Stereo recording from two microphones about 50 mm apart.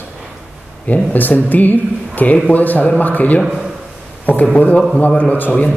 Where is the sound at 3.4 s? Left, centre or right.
Centre.